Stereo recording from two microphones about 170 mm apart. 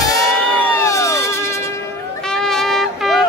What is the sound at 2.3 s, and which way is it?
Music, 5° left (ahead or behind).